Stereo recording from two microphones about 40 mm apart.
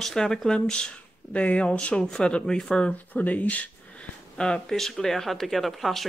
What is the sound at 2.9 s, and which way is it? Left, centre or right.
Speech, left.